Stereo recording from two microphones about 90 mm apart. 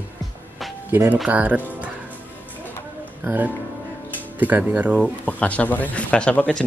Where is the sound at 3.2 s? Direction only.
20° right (ahead or behind).